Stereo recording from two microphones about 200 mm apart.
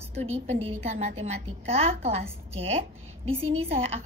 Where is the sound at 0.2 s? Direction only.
30° right (ahead or behind).